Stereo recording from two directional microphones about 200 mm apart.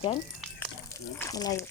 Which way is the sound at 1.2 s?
15° left (ahead or behind).